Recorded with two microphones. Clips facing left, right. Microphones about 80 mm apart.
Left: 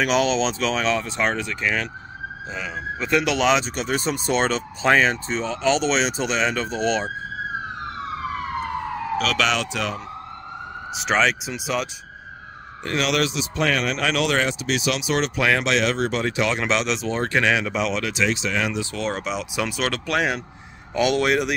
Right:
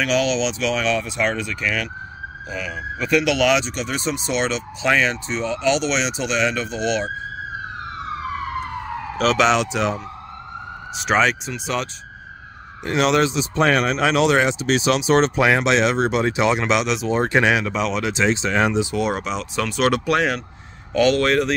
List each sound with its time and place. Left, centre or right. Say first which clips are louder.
0.0 s speech: even; left
9.2 s speech: right 7 dB; right
11.0 s speech: right 2 dB; centre
13.0 s a man's voice: right 5 dB; right
13.9 s speech: right 5 dB; right
14.6 s a man's voice: right 5 dB; right
15.4 s speech: right 3 dB; right
16.5 s speech: right 3 dB; centre
17.2 s speech: right 3 dB; centre
17.6 s speech: right 2 dB; centre
18.0 s a man's voice: right 3 dB; right
18.8 s speech: right 5 dB; centre
19.2 s speech: right 1 dB; centre
20.9 s speech: right 3 dB; centre